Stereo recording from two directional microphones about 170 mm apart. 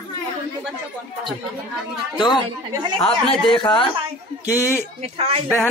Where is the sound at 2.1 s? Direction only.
25° left (ahead or behind).